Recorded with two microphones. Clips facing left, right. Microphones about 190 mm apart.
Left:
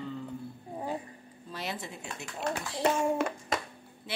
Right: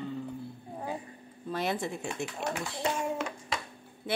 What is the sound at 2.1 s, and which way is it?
Speech, 10° right (ahead or behind).